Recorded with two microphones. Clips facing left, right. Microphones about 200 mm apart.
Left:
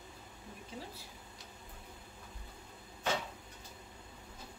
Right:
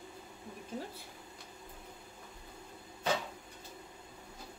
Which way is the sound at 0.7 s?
45° right (ahead or behind).